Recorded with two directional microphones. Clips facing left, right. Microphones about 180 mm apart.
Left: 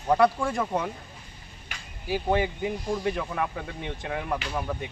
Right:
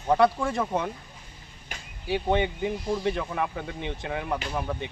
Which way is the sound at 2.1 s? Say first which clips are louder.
Even; centre (ahead or behind).